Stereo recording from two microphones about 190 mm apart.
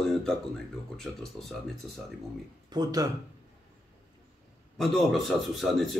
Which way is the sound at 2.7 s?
20° right (ahead or behind).